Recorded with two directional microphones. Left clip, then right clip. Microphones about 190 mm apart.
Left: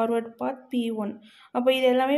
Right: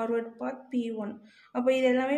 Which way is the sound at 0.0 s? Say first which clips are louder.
Left 5 dB; 30° left (ahead or behind).